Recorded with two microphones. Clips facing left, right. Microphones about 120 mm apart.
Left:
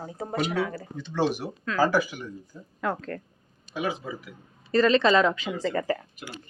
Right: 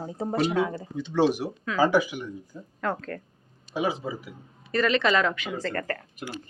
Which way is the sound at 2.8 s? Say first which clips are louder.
Even; 5° left (ahead or behind).